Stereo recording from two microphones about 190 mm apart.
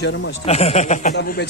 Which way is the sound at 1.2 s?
60° left (ahead or behind).